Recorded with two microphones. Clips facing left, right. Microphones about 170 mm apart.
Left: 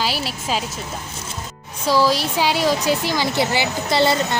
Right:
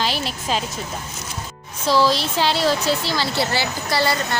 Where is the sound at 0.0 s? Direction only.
5° left (ahead or behind).